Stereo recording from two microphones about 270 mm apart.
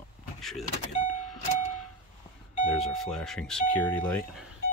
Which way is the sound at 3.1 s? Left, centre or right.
Centre.